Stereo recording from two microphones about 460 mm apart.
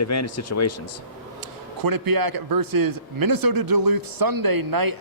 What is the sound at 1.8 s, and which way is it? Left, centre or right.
A man's voice, right.